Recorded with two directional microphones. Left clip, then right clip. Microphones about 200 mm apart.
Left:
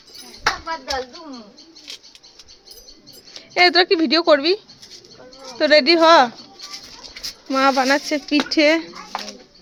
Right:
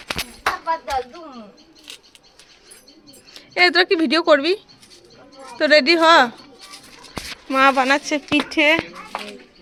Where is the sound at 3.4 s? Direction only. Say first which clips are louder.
Left 1 dB; 15° left (ahead or behind).